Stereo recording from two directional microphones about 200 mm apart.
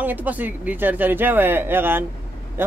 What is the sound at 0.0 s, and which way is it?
A man's voice, 10° right (ahead or behind).